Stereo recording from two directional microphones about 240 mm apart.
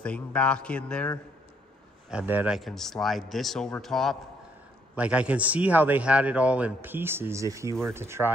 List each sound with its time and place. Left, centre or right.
0.0 s a man's voice: centre